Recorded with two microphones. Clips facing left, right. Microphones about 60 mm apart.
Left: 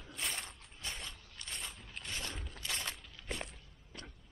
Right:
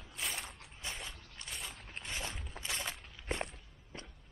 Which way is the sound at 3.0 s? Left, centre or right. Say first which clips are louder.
Right 4 dB; right.